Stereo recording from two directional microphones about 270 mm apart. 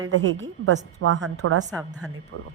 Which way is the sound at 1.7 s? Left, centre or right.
Centre.